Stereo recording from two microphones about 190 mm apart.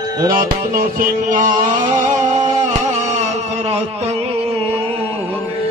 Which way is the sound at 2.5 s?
35° right (ahead or behind).